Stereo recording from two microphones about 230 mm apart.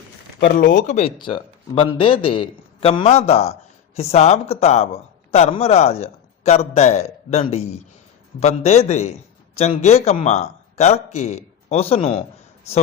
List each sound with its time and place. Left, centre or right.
0.3 s a man's voice: left